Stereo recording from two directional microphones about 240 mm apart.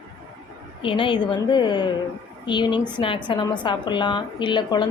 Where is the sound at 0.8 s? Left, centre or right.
Left.